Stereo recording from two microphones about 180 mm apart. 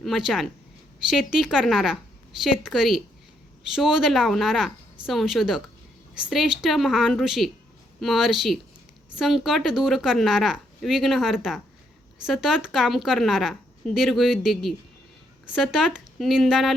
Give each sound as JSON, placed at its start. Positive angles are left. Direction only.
{"t": 0.0, "sound": "a woman's voice", "side_deg": 0}